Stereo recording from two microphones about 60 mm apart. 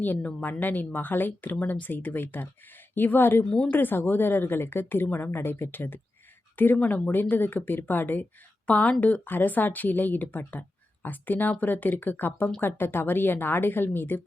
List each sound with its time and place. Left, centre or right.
0.2 s a woman's voice: left